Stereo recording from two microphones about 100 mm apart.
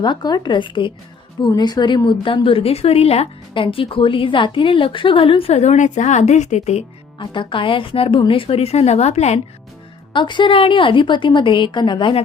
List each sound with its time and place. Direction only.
0.0 s a woman's voice: 45° left (ahead or behind); by 5.5 s 65° left (ahead or behind)
6.7 s music: 90° left
7.3 s a woman's voice: 55° left (ahead or behind); by 9.4 s 90° left
10.1 s a woman's voice: 50° left (ahead or behind)